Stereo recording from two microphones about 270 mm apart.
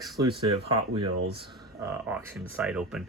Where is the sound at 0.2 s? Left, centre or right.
Centre.